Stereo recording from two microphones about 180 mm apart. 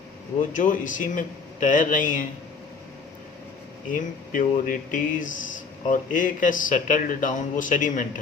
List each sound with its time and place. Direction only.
0.5 s speech: 45° left (ahead or behind)
3.8 s speech: 50° left (ahead or behind)